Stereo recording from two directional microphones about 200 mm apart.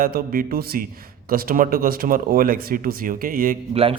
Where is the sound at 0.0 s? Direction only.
45° right (ahead or behind).